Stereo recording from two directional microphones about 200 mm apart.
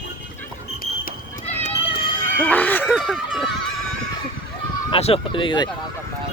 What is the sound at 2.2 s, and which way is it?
Music, 10° left (ahead or behind).